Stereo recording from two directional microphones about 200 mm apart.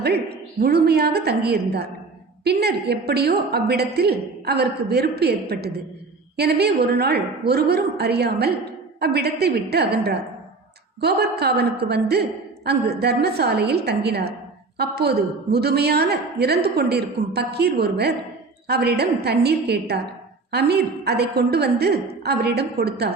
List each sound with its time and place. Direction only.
0.0 s a woman's voice: 55° right (ahead or behind)